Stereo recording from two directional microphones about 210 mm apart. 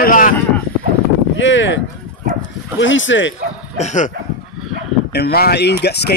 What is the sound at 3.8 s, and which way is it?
Speech, 35° left (ahead or behind).